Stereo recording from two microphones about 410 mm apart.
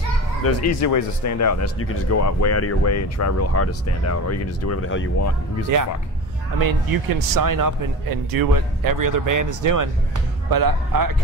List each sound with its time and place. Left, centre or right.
0.4 s speech: left
6.6 s a man's voice: right